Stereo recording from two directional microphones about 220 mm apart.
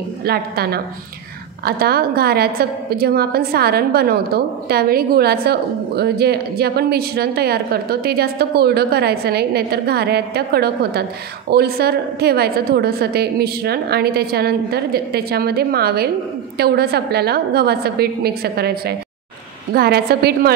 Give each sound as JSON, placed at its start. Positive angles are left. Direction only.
{"t": 0.2, "sound": "a woman's voice", "side_deg": -45}